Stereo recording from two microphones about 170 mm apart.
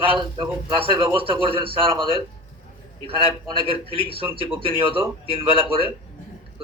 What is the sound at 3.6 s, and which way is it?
A man's voice, 30° right (ahead or behind).